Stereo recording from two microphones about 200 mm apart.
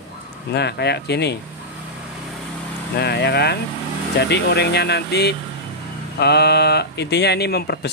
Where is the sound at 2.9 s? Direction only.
55° left (ahead or behind).